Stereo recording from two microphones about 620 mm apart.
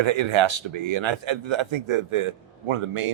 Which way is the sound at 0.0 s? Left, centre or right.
Right.